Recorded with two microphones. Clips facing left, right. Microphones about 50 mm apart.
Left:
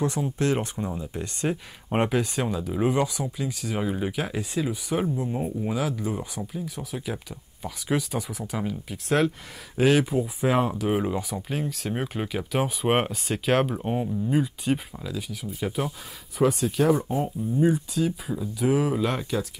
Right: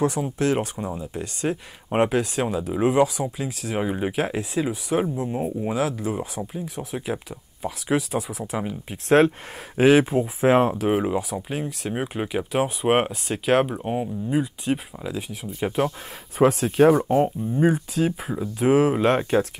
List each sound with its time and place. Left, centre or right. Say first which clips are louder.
0.0 s speech: right 3 dB; centre
3.7 s speech: right 4 dB; centre
5.6 s speech: right 4 dB; centre
6.4 s speech: right 2 dB; right
8.9 s speech: right 7 dB; right
11.0 s speech: right 3 dB; centre
15.0 s speech: right 3 dB; right
16.3 s speech: right 5 dB; right
18.3 s speech: right 3 dB; right
18.7 s speech: right 6 dB; right